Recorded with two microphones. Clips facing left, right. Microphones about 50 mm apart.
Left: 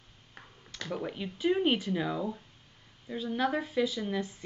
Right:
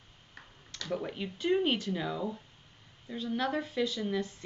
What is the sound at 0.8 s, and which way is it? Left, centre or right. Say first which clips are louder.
Speech: even; centre.